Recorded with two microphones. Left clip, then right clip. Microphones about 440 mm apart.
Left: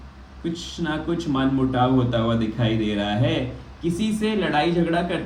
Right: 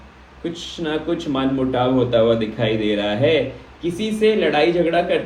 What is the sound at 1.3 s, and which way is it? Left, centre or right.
Speech, centre.